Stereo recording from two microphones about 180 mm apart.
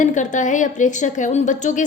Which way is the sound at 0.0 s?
45° left (ahead or behind).